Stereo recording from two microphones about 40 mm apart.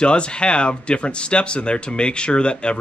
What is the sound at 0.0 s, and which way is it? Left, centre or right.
Speech, left.